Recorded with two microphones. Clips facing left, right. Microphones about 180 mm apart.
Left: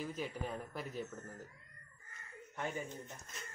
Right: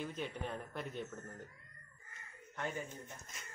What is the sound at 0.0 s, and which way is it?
Speech, 5° left (ahead or behind).